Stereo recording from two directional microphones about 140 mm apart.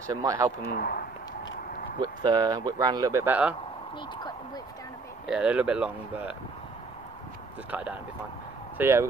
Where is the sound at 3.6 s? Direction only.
35° left (ahead or behind).